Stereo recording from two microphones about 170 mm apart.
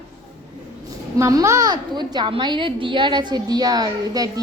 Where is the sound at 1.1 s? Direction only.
20° right (ahead or behind).